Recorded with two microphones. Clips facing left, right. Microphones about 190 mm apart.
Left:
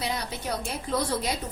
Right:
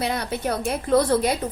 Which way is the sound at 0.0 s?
60° right (ahead or behind).